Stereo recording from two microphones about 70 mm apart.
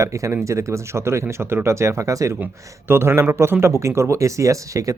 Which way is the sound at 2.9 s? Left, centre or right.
Right.